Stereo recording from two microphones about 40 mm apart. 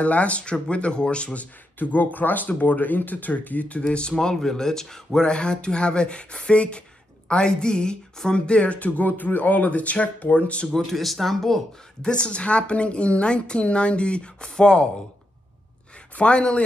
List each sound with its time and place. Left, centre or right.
0.0 s a woman's voice: left
1.8 s speech: left
3.8 s a woman's voice: left
5.2 s a woman's voice: left
10.9 s speech: centre
12.0 s a woman's voice: left
16.2 s a woman's voice: left